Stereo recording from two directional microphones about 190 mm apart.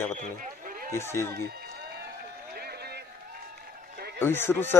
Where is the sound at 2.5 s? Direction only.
55° right (ahead or behind).